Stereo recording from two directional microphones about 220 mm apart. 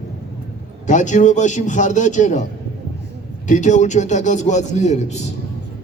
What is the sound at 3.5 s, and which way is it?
A man's voice, 35° left (ahead or behind).